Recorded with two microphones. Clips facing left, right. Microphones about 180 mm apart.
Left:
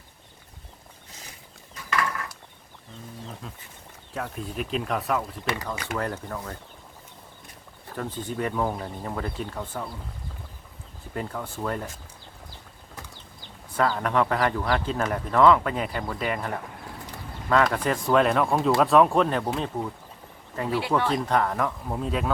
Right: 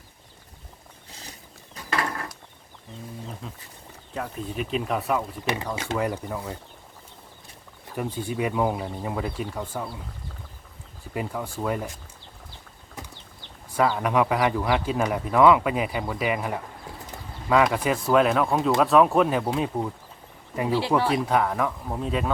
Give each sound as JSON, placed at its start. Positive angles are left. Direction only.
{"t": 1.7, "sound": "a sound", "side_deg": -30}
{"t": 3.4, "sound": "speech", "side_deg": 0}
{"t": 5.7, "sound": "speech", "side_deg": -25}
{"t": 6.0, "sound": "speech", "side_deg": -10}
{"t": 7.9, "sound": "speech", "side_deg": -10}
{"t": 11.1, "sound": "speech", "side_deg": -10}
{"t": 13.7, "sound": "speech", "side_deg": -10}
{"t": 20.7, "sound": "speech", "side_deg": -25}
{"t": 21.1, "sound": "speech", "side_deg": -5}